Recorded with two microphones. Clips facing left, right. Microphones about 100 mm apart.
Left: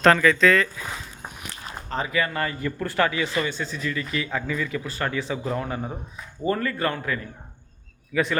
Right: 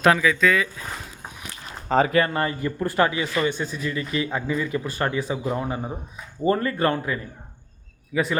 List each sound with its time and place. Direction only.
0.0 s speech: 10° right (ahead or behind)
2.0 s speech: 45° right (ahead or behind)
2.3 s a man's voice: 30° right (ahead or behind); by 6.0 s 10° right (ahead or behind)
6.4 s a man's voice: 25° right (ahead or behind)